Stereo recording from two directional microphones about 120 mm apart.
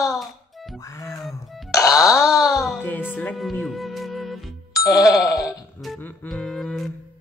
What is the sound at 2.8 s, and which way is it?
Music, 15° left (ahead or behind).